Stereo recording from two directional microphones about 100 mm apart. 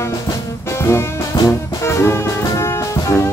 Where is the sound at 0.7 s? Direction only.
25° left (ahead or behind).